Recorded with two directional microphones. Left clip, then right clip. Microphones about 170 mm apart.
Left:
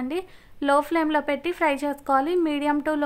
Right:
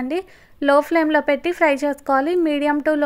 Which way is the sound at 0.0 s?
20° right (ahead or behind).